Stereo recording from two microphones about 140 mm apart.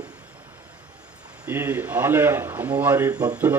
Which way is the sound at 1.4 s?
15° right (ahead or behind).